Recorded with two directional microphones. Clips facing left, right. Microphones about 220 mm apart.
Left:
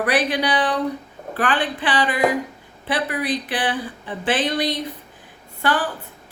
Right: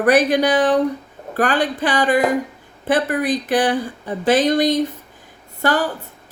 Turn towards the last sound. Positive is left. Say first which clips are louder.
# right 3 dB
turn(degrees=-40)  # may be behind; listen again after turning